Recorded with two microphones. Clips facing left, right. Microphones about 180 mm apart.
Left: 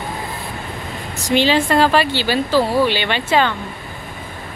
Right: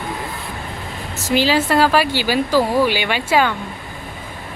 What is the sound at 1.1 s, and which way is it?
A woman's voice, 5° right (ahead or behind).